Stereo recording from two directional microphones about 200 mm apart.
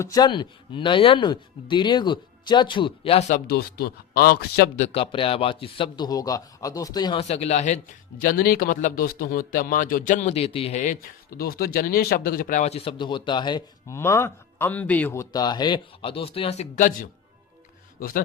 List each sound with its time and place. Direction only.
0.0 s speech: 20° left (ahead or behind); by 3.4 s 35° left (ahead or behind)
3.4 s a man's voice: 50° left (ahead or behind)
4.8 s speech: 30° left (ahead or behind)
8.2 s speech: 45° left (ahead or behind)